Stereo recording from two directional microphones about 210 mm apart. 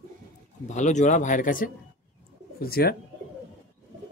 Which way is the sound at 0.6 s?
35° left (ahead or behind).